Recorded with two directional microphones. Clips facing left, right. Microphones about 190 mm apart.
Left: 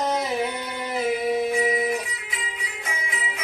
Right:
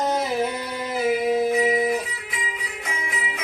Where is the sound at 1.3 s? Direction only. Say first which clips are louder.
Right 3 dB; 25° right (ahead or behind).